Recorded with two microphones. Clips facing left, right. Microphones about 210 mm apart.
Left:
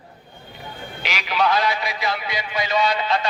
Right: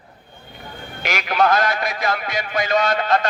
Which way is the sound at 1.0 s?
50° right (ahead or behind).